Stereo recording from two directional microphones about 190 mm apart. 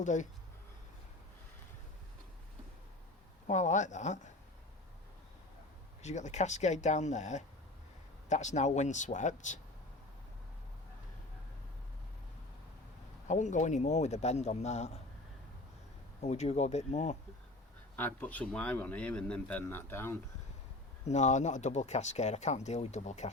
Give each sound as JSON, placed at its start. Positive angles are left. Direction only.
{"t": 0.0, "sound": "speech", "side_deg": 40}
{"t": 3.4, "sound": "speech", "side_deg": 40}
{"t": 6.0, "sound": "speech", "side_deg": 35}
{"t": 13.2, "sound": "speech", "side_deg": 40}
{"t": 16.2, "sound": "speech", "side_deg": 35}
{"t": 17.9, "sound": "speech", "side_deg": 10}
{"t": 21.0, "sound": "speech", "side_deg": 35}